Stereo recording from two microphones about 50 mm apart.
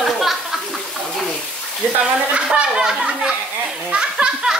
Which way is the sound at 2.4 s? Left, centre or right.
Centre.